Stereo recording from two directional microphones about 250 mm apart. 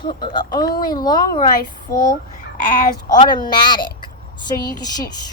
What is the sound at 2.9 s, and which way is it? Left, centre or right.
A woman's voice, centre.